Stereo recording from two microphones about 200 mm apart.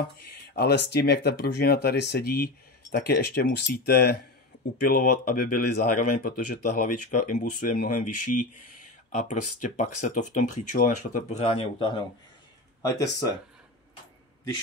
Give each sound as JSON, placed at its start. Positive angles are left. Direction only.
{"t": 0.6, "sound": "speech", "side_deg": 55}